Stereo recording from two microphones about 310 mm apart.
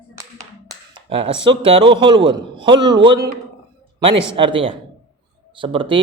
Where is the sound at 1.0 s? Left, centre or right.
Centre.